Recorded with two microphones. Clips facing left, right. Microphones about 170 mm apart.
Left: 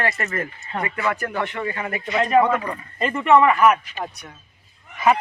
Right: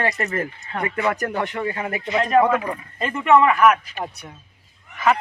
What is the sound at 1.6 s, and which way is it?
Speech, 20° right (ahead or behind).